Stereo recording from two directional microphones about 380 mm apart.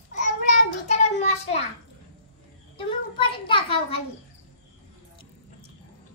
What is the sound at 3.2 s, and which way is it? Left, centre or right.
Speech, centre.